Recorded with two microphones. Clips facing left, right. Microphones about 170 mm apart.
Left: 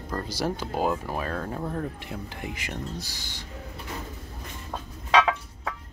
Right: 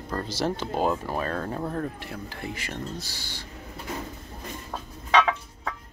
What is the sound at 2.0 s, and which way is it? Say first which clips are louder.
Speech: even; 20° left (ahead or behind).